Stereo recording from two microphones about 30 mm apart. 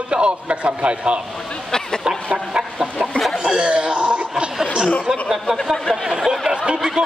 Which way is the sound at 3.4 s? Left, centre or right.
Right.